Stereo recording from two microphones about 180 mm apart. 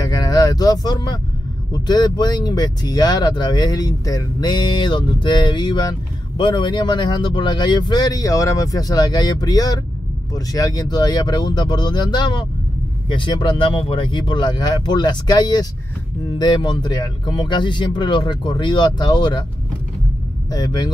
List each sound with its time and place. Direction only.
0.0 s vehicle: 20° left (ahead or behind)
1.7 s speech: 25° left (ahead or behind)
20.5 s speech: 25° left (ahead or behind)